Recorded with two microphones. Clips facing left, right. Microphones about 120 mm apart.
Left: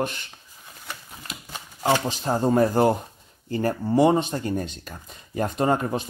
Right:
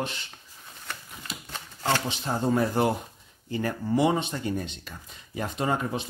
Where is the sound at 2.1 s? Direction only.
40° left (ahead or behind).